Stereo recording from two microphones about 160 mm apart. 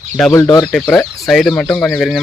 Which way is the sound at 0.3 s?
25° left (ahead or behind).